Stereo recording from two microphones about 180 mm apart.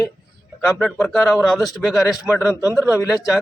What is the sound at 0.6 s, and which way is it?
Speech, 5° left (ahead or behind).